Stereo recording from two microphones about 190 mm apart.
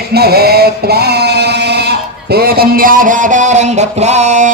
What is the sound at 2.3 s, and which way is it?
Speech, 55° right (ahead or behind).